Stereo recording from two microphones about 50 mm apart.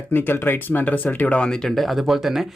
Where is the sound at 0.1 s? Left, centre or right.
Left.